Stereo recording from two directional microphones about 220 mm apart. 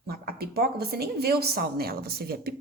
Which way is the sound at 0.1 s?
45° right (ahead or behind).